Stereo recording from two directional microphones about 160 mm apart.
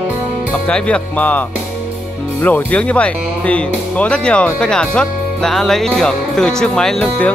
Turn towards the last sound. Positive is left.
turn(degrees=5)  # may be behind; listen again after turning